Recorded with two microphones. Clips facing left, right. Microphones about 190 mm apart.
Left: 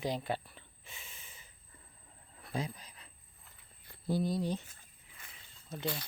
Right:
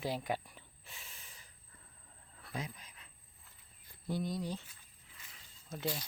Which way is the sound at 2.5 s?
35° left (ahead or behind).